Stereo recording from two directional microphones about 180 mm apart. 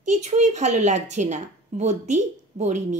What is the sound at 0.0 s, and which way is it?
A woman's voice, 40° right (ahead or behind).